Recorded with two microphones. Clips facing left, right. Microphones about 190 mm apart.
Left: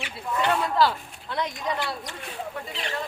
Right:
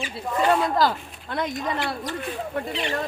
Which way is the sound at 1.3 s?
50° right (ahead or behind).